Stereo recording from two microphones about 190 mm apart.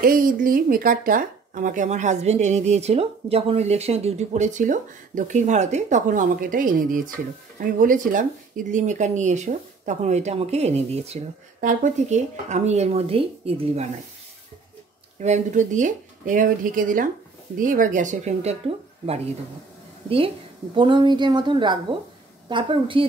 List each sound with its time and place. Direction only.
0.0 s speech: 50° right (ahead or behind); by 13.8 s 30° right (ahead or behind)
15.2 s speech: 40° right (ahead or behind)
20.7 s speech: 25° right (ahead or behind)